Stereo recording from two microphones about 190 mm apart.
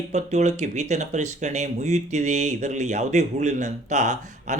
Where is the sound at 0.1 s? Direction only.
35° right (ahead or behind).